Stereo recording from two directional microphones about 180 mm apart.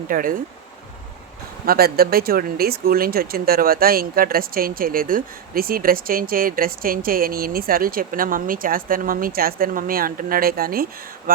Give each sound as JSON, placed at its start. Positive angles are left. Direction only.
{"t": 0.1, "sound": "speech", "side_deg": -50}
{"t": 1.6, "sound": "speech", "side_deg": -55}